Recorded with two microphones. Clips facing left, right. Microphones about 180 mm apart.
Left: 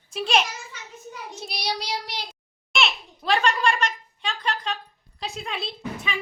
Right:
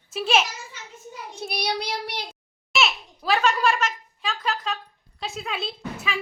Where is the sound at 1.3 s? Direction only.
60° right (ahead or behind).